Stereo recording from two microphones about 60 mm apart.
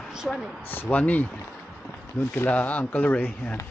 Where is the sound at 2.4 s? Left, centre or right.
Left.